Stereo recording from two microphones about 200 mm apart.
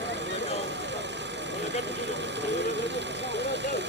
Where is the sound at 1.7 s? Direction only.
60° right (ahead or behind).